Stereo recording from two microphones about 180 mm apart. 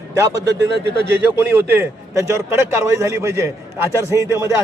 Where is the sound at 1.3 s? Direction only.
15° right (ahead or behind).